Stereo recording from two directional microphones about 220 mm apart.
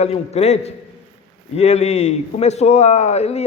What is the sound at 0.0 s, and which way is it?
A man's voice, 30° left (ahead or behind).